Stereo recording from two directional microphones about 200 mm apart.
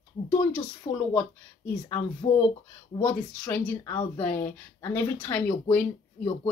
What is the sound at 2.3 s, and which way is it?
Speech, 30° left (ahead or behind).